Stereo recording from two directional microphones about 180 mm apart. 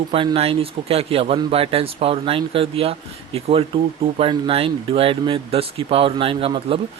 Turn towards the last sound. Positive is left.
turn(degrees=-30)  # may be behind; listen again after turning